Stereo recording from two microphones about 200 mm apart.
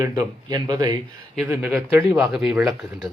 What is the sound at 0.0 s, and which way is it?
Speech, 20° right (ahead or behind).